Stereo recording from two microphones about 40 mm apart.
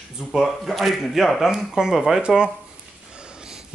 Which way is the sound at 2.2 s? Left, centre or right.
Right.